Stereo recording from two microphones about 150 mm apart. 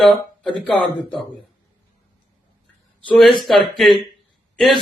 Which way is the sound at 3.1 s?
Centre (ahead or behind).